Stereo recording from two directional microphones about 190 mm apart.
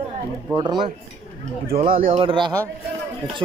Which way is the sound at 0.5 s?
25° right (ahead or behind).